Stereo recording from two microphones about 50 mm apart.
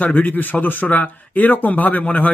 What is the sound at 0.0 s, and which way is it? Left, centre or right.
Speech, left.